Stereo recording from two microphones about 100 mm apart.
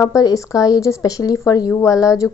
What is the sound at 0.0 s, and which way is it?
Speech, 35° left (ahead or behind).